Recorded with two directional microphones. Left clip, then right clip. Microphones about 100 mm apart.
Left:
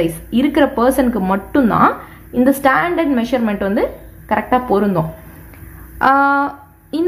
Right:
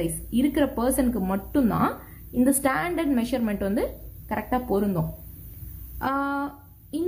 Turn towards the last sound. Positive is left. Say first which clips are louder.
# left 10 dB
turn(degrees=25)  # may be behind; listen again after turning